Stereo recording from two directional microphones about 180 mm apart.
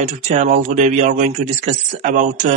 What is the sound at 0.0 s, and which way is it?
Speech, 40° right (ahead or behind).